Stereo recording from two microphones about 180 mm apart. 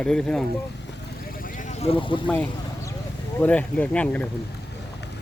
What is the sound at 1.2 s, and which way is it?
Vehicle, 55° left (ahead or behind).